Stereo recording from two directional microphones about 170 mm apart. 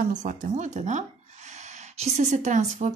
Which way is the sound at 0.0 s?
45° right (ahead or behind).